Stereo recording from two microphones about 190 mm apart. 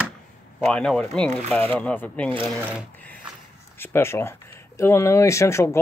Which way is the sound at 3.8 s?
15° left (ahead or behind).